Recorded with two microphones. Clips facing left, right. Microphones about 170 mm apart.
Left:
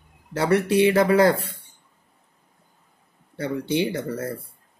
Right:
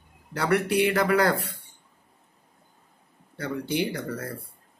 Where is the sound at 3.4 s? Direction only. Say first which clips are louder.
Left 4 dB; 25° left (ahead or behind).